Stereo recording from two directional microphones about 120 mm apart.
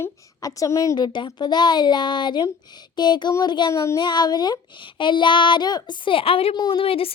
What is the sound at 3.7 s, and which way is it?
Speech, 25° left (ahead or behind).